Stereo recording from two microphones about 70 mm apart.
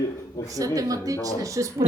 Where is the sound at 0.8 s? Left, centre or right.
Right.